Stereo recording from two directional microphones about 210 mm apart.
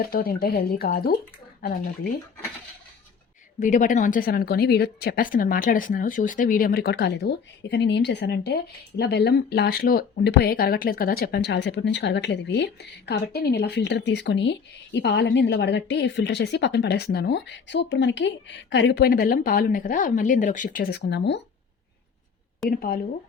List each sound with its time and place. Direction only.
0.0 s speech: 45° left (ahead or behind)
3.6 s speech: 35° left (ahead or behind); by 21.4 s 55° left (ahead or behind)
22.6 s speech: centre (ahead or behind)